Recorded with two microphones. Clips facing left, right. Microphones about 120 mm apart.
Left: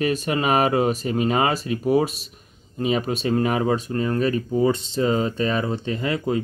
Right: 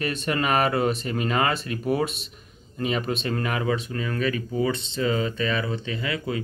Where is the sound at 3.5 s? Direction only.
35° left (ahead or behind).